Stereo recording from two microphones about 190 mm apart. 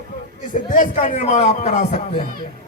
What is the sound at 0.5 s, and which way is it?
Speech, 45° left (ahead or behind).